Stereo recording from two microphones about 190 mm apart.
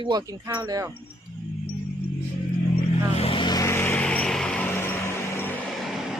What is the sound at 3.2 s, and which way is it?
Vehicle, 30° left (ahead or behind).